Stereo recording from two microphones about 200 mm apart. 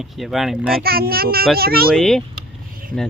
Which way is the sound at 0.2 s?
Centre (ahead or behind).